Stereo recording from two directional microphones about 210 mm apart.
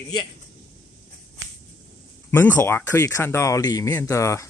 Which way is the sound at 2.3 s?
10° left (ahead or behind).